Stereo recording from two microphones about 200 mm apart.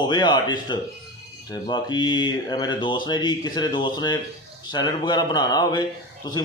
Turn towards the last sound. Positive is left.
turn(degrees=20)  # may be behind; listen again after turning